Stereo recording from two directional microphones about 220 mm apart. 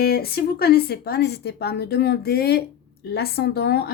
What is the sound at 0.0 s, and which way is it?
Speech, 45° left (ahead or behind).